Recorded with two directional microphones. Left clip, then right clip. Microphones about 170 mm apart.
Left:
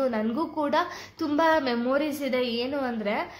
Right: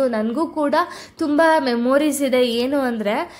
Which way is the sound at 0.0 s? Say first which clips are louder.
Right 7 dB; 35° right (ahead or behind).